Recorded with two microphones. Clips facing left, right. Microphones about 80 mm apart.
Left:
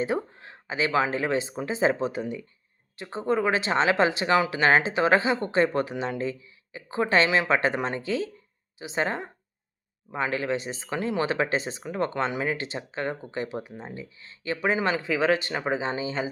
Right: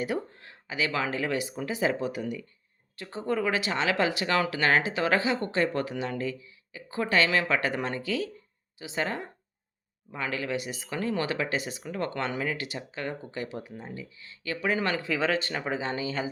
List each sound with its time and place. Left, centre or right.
0.0 s speech: left